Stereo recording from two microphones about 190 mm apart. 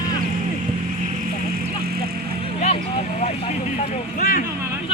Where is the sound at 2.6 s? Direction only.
35° left (ahead or behind).